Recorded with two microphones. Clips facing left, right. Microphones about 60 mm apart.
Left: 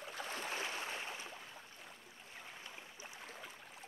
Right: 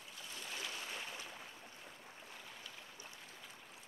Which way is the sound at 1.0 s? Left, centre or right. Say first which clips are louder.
Left 2 dB; left.